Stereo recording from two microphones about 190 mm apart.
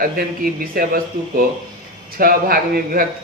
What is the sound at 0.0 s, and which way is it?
Speech, 50° right (ahead or behind).